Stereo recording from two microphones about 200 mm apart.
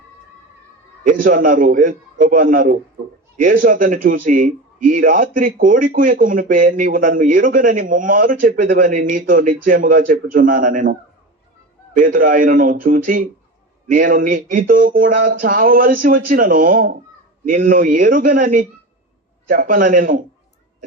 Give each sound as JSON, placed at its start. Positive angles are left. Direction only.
{"t": 1.0, "sound": "speech", "side_deg": -40}
{"t": 11.9, "sound": "a man's voice", "side_deg": -45}